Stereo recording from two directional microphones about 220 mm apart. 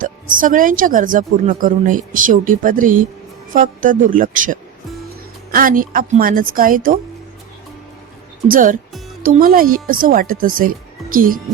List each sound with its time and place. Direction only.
0.0 s a woman's voice: 40° right (ahead or behind)
8.4 s a woman's voice: 40° right (ahead or behind)